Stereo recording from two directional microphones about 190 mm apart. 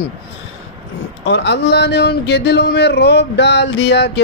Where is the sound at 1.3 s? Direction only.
65° left (ahead or behind).